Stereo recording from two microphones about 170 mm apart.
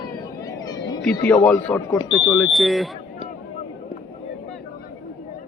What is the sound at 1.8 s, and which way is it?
Speech, 20° left (ahead or behind).